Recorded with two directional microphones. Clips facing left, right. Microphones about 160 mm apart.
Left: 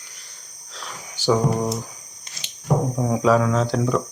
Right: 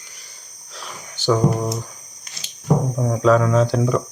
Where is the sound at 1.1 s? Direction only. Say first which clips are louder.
Right 1 dB; 10° left (ahead or behind).